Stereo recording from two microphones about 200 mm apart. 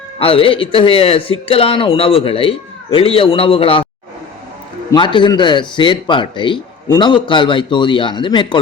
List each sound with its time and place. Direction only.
0.2 s speech: 25° left (ahead or behind)
4.9 s speech: 25° left (ahead or behind)